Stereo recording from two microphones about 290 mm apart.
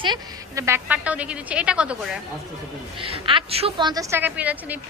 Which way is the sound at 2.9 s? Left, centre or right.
Centre.